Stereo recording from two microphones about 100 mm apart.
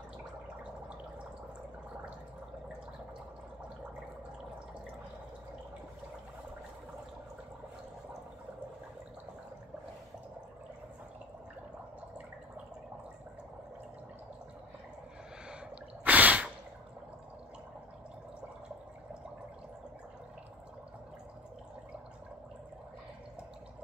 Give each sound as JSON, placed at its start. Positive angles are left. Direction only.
{"t": 16.0, "sound": "gasp", "side_deg": -15}